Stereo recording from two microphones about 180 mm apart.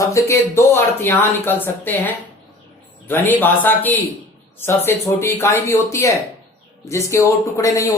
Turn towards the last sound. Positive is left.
turn(degrees=15)  # may be behind; listen again after turning